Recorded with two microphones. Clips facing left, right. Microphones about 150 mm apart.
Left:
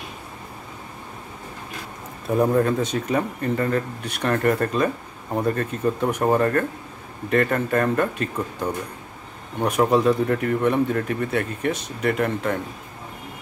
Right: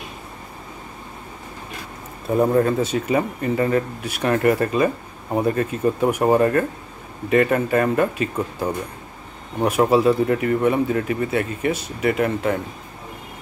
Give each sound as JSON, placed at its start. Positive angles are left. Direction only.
{"t": 2.2, "sound": "speech", "side_deg": 0}